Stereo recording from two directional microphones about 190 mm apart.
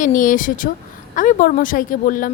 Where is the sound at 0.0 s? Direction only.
45° left (ahead or behind).